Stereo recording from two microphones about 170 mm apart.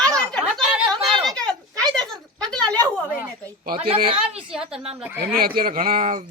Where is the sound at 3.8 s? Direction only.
35° right (ahead or behind).